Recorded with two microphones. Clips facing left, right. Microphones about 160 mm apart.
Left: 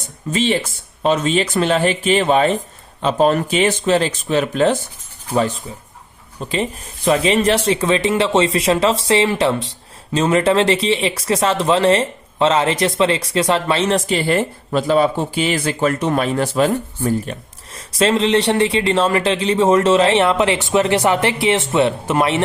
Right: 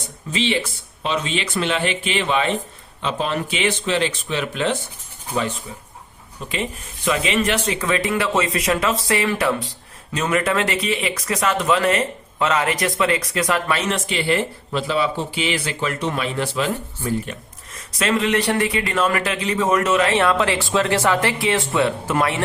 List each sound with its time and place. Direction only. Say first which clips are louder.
0.3 s a man's voice: left 4 dB; 45° left (ahead or behind)
17.7 s a man's voice: left 5 dB; 30° left (ahead or behind)